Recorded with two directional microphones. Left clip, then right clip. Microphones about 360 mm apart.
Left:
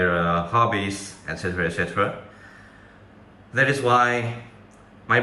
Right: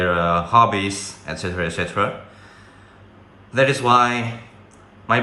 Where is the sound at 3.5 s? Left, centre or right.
Centre.